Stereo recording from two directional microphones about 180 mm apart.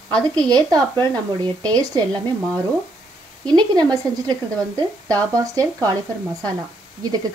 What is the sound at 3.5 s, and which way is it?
Speech, 25° right (ahead or behind).